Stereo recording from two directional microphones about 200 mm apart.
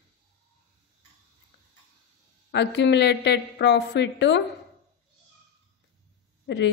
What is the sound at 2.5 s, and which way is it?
Speech, 60° left (ahead or behind).